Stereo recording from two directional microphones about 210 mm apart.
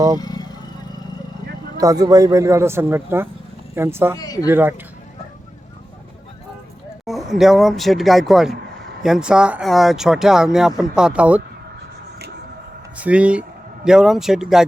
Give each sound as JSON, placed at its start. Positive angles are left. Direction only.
{"t": 0.2, "sound": "speech", "side_deg": 20}
{"t": 1.8, "sound": "a man's voice", "side_deg": -15}
{"t": 4.2, "sound": "speech", "side_deg": 15}
{"t": 4.4, "sound": "a man's voice", "side_deg": -10}
{"t": 7.0, "sound": "speech", "side_deg": 0}
{"t": 13.0, "sound": "speech", "side_deg": -5}